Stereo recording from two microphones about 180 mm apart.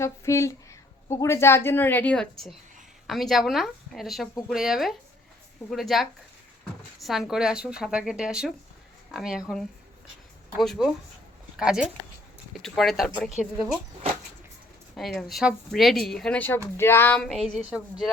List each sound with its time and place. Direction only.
0.0 s a woman's voice: 15° left (ahead or behind)
14.9 s a woman's voice: centre (ahead or behind)
17.2 s speech: centre (ahead or behind)